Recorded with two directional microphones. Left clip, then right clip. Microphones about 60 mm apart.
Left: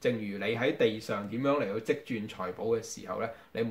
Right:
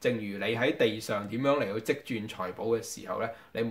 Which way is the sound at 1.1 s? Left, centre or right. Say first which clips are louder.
Right 2 dB; right.